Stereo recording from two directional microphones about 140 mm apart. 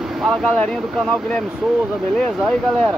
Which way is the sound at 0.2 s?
5° left (ahead or behind).